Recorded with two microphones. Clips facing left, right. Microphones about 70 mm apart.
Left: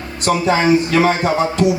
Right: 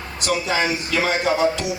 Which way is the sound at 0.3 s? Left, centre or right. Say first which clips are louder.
Left 8 dB; left.